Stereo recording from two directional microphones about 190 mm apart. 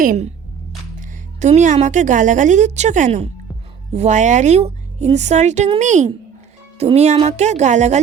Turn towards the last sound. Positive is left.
turn(degrees=-40)  # may be behind; listen again after turning